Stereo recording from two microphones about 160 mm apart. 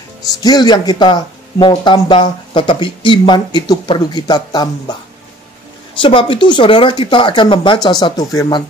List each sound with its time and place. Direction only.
0.3 s speech: 25° left (ahead or behind)
5.9 s speech: 30° left (ahead or behind)